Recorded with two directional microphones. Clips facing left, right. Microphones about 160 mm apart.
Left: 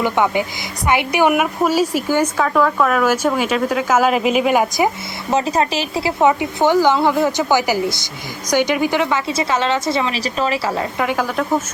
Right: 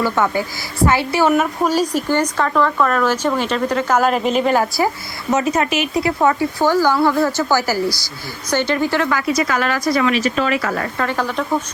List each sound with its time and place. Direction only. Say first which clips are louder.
0.0 s speech: left 1 dB; 15° left (ahead or behind)
5.3 s speech: even; 30° left (ahead or behind)
10.9 s speech: left 1 dB; 15° left (ahead or behind)